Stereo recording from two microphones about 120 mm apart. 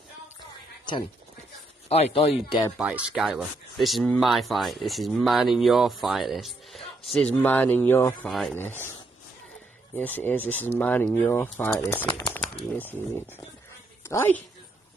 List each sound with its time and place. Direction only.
1.9 s speech: 60° left (ahead or behind)
2.8 s speech: 10° right (ahead or behind)
7.3 s speech: 15° left (ahead or behind)
8.3 s speech: centre (ahead or behind)
8.5 s speech: 15° left (ahead or behind)
9.9 s a woman's voice: 15° left (ahead or behind)